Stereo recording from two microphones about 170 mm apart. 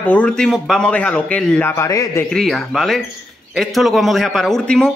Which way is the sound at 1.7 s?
15° left (ahead or behind).